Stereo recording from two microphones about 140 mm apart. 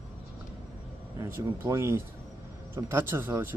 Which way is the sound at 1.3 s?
20° right (ahead or behind).